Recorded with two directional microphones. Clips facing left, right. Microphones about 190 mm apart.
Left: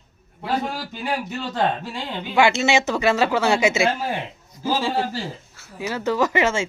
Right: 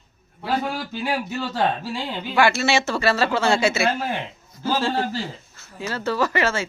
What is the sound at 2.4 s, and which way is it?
Speech, 20° left (ahead or behind).